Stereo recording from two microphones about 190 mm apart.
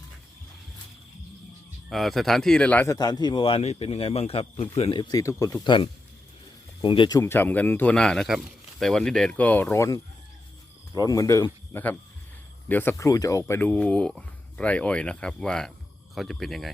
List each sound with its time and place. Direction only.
1.9 s a man's voice: centre (ahead or behind)